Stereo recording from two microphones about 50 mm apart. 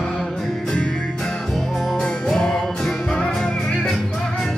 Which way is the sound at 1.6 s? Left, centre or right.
Centre.